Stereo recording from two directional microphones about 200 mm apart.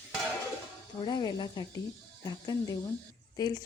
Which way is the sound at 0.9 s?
20° left (ahead or behind).